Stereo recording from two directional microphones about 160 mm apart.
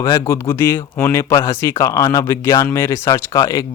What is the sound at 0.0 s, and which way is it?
Speech, 20° left (ahead or behind).